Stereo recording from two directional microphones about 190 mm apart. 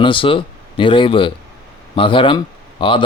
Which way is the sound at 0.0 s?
25° left (ahead or behind).